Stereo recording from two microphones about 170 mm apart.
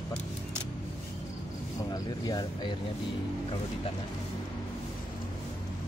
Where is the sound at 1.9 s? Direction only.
25° left (ahead or behind).